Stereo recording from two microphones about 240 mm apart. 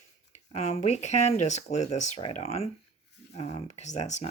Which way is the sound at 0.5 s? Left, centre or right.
Left.